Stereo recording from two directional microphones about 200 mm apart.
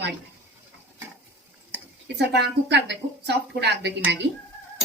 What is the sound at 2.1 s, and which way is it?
Speech, 60° right (ahead or behind).